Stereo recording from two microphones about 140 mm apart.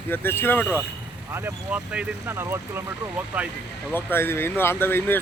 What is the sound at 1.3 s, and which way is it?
Speech, 10° right (ahead or behind).